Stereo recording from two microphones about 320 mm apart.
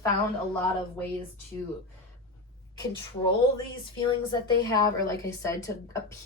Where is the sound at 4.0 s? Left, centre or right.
Centre.